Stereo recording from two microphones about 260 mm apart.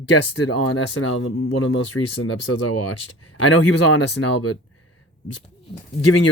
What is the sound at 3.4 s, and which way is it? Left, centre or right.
A man's voice, left.